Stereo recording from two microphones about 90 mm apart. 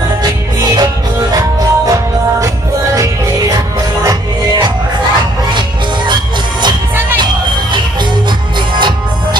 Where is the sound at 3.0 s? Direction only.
40° right (ahead or behind).